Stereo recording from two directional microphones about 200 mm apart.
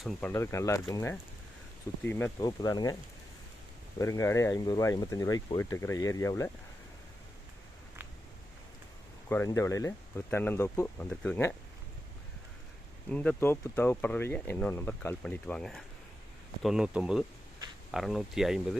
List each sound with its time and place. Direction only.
0.0 s speech: 10° left (ahead or behind)
3.9 s speech: 15° left (ahead or behind)
9.3 s speech: 15° left (ahead or behind)
13.1 s speech: 5° left (ahead or behind)